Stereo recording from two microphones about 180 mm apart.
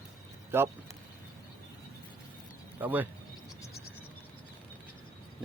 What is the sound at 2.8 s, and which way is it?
Speech, 10° right (ahead or behind).